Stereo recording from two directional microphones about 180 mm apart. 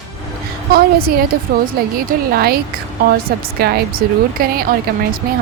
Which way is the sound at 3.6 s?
60° right (ahead or behind).